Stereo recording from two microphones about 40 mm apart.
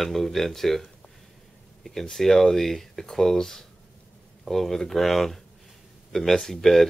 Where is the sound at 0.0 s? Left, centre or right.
Centre.